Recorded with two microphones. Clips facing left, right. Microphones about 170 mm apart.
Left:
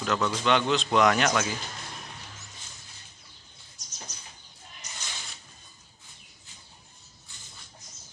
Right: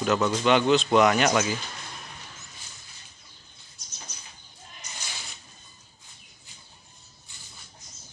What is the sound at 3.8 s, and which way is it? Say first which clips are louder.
Bird: right 2 dB; 40° left (ahead or behind).